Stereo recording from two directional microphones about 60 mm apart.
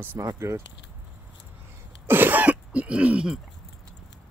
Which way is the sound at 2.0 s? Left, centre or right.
Right.